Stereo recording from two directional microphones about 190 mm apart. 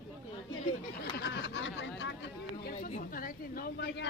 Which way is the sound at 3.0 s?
50° left (ahead or behind).